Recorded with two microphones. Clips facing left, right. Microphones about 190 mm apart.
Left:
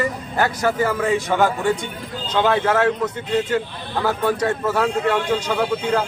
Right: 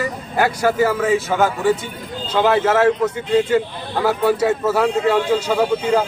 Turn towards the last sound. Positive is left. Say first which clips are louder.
# right 3 dB
turn(degrees=-10)  # may be behind; listen again after turning